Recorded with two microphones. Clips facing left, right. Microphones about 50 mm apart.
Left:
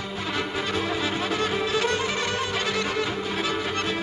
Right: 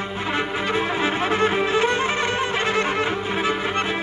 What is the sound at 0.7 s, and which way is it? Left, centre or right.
Music, right.